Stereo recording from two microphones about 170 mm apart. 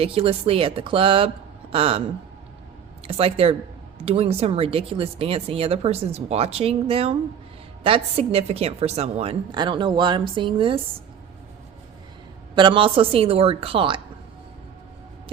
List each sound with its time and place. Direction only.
0.0 s speech: 35° right (ahead or behind)
3.1 s speech: 35° right (ahead or behind)
12.5 s speech: 30° right (ahead or behind)